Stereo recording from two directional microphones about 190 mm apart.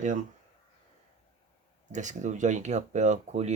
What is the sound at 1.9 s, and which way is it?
Speech, 40° right (ahead or behind).